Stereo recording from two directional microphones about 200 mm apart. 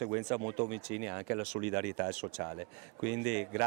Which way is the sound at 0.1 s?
20° right (ahead or behind).